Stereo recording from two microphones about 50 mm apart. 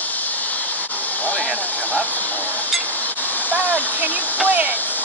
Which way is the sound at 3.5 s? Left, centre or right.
Right.